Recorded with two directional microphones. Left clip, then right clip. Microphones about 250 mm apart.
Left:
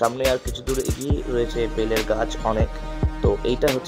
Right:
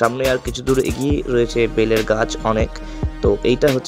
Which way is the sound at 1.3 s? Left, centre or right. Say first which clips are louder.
Right 5 dB; right.